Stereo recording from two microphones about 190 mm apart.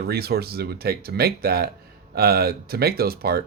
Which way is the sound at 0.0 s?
55° right (ahead or behind).